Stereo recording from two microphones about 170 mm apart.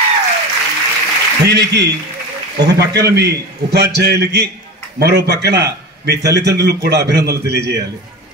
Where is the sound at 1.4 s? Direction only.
75° right (ahead or behind).